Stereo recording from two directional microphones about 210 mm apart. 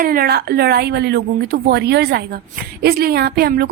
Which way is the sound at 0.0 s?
45° right (ahead or behind).